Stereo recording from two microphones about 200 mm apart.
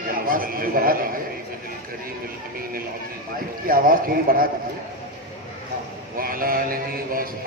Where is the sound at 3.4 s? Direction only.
45° right (ahead or behind).